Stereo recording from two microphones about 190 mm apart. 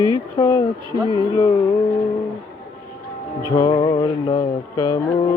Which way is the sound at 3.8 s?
25° left (ahead or behind).